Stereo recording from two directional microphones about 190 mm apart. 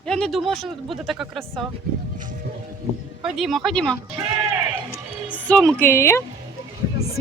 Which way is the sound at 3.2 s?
Centre (ahead or behind).